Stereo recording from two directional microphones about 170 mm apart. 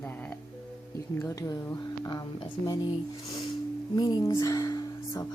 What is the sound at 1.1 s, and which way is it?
Speech, 15° left (ahead or behind).